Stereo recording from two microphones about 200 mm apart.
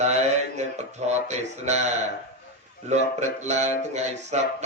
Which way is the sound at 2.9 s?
35° right (ahead or behind).